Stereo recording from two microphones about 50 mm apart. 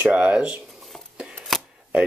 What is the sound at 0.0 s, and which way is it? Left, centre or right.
Speech, right.